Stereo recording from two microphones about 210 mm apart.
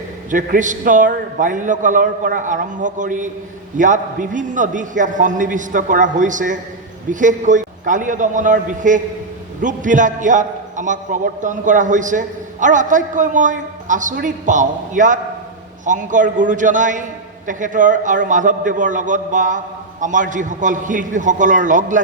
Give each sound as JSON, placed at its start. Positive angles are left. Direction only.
{"t": 0.3, "sound": "a man's voice", "side_deg": -40}